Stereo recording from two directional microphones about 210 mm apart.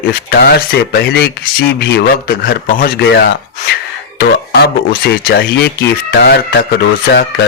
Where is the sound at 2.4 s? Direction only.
45° left (ahead or behind).